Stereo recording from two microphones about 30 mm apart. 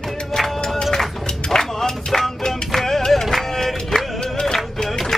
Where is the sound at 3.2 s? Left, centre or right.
Centre.